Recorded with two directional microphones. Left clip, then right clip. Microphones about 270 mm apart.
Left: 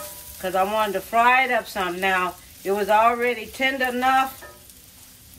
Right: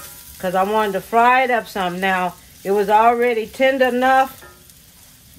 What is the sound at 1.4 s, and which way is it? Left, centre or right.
Speech, right.